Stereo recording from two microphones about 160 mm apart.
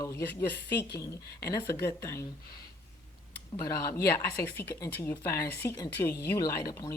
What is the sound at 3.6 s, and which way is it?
Speech, 20° left (ahead or behind).